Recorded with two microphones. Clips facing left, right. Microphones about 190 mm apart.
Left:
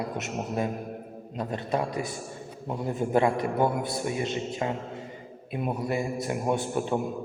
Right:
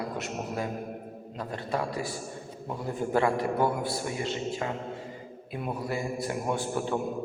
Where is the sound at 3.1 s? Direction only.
20° left (ahead or behind).